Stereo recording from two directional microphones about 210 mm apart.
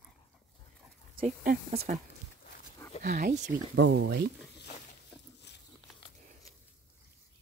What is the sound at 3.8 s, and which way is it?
Speech, 60° right (ahead or behind).